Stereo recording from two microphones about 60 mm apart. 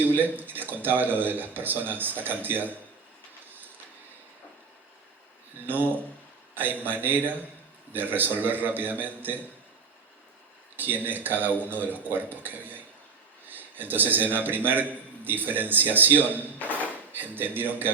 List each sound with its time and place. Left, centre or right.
0.1 s speech: right
5.6 s speech: right
6.5 s a sound: right
6.8 s speech: right
10.8 s speech: right
13.5 s a sound: right
14.3 s speech: right
16.6 s a sound: left
16.9 s speech: right